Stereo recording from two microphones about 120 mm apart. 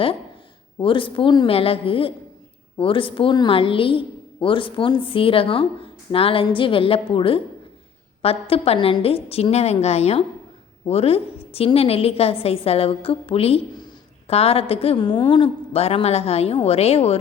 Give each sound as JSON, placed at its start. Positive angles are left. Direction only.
{"t": 0.8, "sound": "a woman's voice", "side_deg": 45}
{"t": 1.5, "sound": "a woman's voice", "side_deg": 50}